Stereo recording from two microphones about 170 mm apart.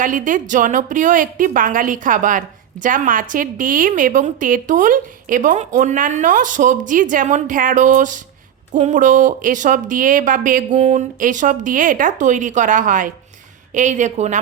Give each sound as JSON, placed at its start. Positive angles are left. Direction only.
{"t": 0.0, "sound": "a woman's voice", "side_deg": -50}